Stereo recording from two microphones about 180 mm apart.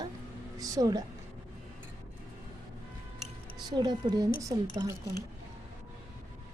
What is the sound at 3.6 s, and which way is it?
Speech, 25° right (ahead or behind).